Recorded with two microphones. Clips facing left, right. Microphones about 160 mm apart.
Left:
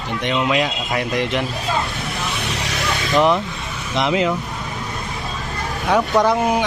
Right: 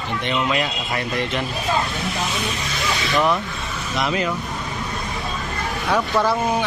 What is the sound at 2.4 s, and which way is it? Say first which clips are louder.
Music: left 1 dB; 75° left (ahead or behind).